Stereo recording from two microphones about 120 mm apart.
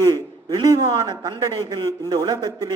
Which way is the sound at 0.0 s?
35° right (ahead or behind).